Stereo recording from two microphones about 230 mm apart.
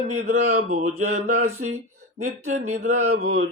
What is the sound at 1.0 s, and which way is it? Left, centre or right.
Mantra, right.